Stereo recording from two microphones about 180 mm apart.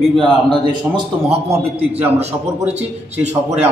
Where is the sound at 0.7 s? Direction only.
30° right (ahead or behind).